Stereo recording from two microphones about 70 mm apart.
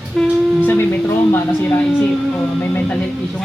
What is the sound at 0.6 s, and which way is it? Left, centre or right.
Speech, left.